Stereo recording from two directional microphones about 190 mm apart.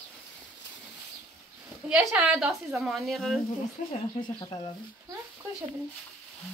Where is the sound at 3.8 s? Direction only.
40° left (ahead or behind).